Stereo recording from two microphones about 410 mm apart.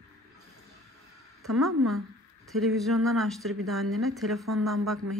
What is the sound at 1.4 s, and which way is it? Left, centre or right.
Speech, centre.